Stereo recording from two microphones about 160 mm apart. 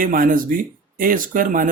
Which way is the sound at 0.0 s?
60° right (ahead or behind).